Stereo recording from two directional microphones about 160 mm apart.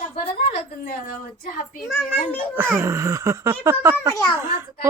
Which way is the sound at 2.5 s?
10° right (ahead or behind).